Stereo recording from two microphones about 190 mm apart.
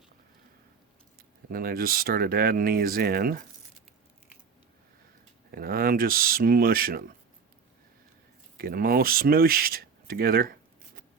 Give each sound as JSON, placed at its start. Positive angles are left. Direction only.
{"t": 1.5, "sound": "speech", "side_deg": -50}
{"t": 5.5, "sound": "speech", "side_deg": -50}
{"t": 8.5, "sound": "speech", "side_deg": -50}